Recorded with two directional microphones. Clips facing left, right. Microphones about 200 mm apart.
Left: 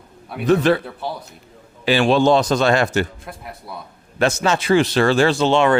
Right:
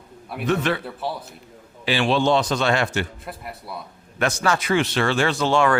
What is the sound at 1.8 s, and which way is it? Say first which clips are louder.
Speech: left 5 dB; 45° left (ahead or behind).